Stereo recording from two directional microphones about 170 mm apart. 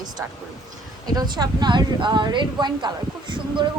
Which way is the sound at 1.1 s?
25° right (ahead or behind).